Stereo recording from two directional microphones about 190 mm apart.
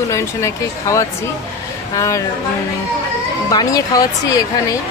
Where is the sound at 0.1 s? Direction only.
15° left (ahead or behind).